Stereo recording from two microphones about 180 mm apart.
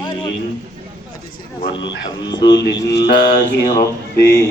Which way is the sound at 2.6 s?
65° left (ahead or behind).